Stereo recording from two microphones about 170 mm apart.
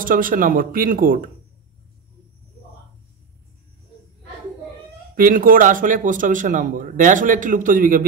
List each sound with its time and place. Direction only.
0.0 s a man's voice: 55° right (ahead or behind)
5.1 s a man's voice: 55° right (ahead or behind)